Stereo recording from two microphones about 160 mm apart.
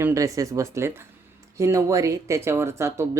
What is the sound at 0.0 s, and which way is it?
Speech, 20° right (ahead or behind).